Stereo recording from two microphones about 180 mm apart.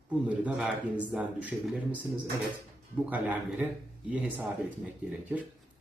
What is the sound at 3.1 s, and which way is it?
Speech, 10° right (ahead or behind).